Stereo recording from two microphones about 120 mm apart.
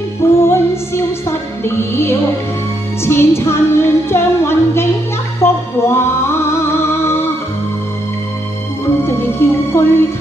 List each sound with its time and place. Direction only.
0.4 s music: 20° left (ahead or behind)
9.0 s music: 20° left (ahead or behind)